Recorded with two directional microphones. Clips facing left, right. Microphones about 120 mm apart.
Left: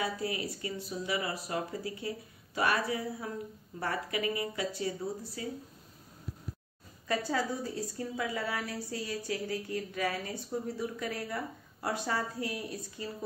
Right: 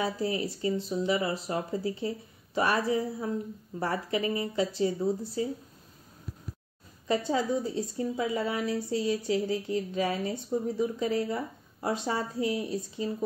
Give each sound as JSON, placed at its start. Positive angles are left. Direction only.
{"t": 0.0, "sound": "a woman's voice", "side_deg": -30}
{"t": 7.1, "sound": "a woman's voice", "side_deg": -25}